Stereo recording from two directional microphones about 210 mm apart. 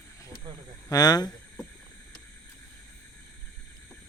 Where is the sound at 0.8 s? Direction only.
20° left (ahead or behind).